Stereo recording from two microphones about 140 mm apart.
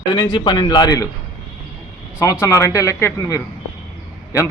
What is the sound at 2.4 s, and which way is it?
A man's voice, 20° left (ahead or behind).